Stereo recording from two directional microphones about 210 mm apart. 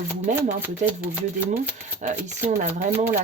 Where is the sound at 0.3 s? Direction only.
35° right (ahead or behind).